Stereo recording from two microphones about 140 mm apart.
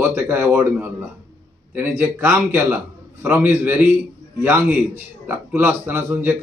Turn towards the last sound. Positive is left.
turn(degrees=-15)  # may be behind; listen again after turning